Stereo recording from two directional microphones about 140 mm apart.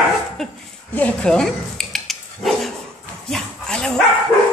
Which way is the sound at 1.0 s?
10° left (ahead or behind).